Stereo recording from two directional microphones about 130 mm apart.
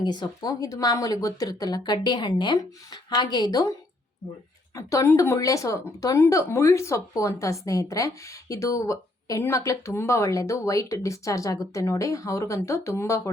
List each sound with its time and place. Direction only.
0.0 s speech: 30° left (ahead or behind)